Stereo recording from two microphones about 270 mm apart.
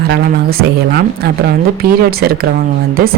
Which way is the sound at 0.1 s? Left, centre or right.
Right.